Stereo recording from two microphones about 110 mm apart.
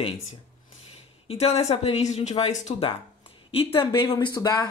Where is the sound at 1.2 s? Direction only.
75° left (ahead or behind).